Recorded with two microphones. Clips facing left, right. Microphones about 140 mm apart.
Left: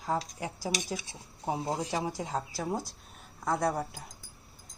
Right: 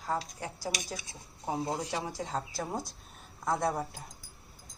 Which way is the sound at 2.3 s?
5° left (ahead or behind).